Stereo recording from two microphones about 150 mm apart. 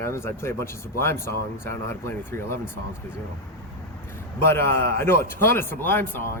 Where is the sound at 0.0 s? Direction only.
15° left (ahead or behind).